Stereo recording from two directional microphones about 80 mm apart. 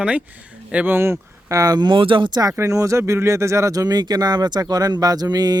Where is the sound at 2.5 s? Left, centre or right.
Right.